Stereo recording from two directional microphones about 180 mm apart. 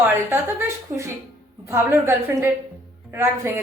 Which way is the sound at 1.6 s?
15° right (ahead or behind).